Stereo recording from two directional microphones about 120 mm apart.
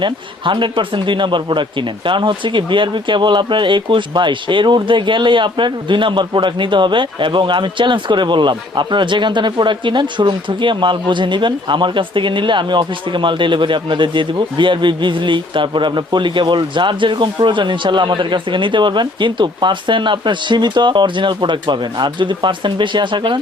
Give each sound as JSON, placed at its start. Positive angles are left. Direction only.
{"t": 0.0, "sound": "speech", "side_deg": -40}